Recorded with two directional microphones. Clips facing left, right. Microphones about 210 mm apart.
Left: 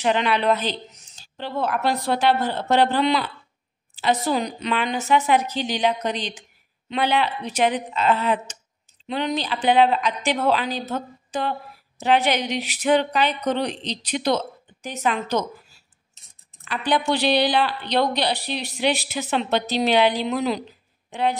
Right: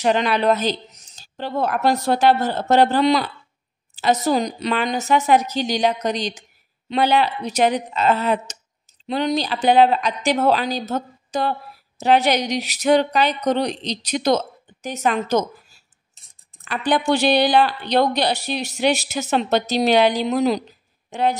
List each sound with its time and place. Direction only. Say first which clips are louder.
0.0 s a woman's voice: right 3 dB; 40° right (ahead or behind)
16.6 s speech: right 3 dB; 45° right (ahead or behind)